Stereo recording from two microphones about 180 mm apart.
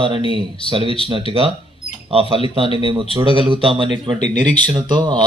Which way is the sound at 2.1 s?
30° right (ahead or behind).